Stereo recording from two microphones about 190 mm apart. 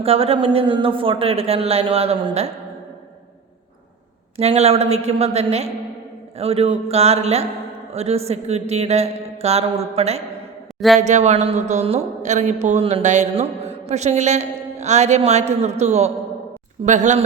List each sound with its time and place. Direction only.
0.0 s speech: 30° right (ahead or behind)
4.4 s speech: 35° right (ahead or behind)
10.8 s a man's voice: centre (ahead or behind)
11.0 s speech: 35° right (ahead or behind)